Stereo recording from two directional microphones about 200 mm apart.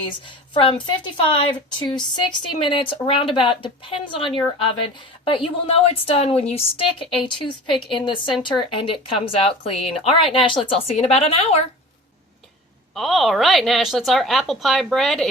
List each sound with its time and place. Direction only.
0.3 s a woman's voice: 25° left (ahead or behind)
12.9 s a woman's voice: centre (ahead or behind)